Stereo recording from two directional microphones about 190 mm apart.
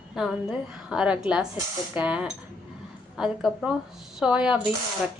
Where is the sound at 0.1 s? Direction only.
Centre (ahead or behind).